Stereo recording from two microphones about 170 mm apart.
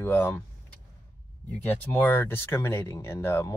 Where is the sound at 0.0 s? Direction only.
10° left (ahead or behind).